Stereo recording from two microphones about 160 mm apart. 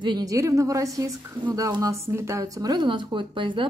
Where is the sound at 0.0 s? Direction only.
25° right (ahead or behind).